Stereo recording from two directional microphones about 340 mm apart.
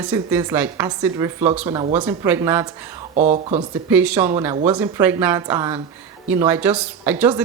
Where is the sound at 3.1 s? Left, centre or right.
Right.